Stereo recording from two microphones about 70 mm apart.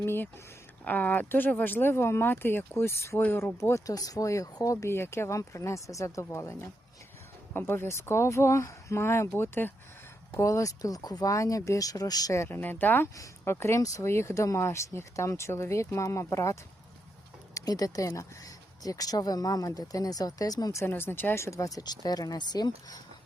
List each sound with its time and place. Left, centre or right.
0.0 s speech: left
0.9 s speech: left
10.3 s speech: left
12.5 s speech: left
17.5 s speech: left
20.7 s speech: left